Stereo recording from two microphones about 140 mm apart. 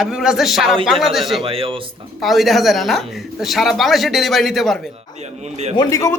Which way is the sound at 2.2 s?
Centre (ahead or behind).